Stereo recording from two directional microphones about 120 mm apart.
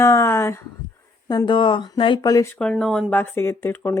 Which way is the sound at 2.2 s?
30° left (ahead or behind).